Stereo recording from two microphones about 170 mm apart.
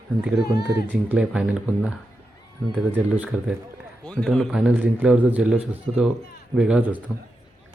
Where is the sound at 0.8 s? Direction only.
5° right (ahead or behind).